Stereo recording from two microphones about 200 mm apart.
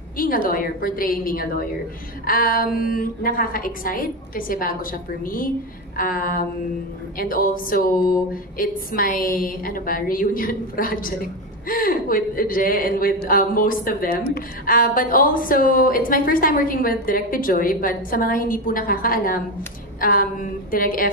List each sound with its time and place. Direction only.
0.2 s a woman's voice: 45° left (ahead or behind)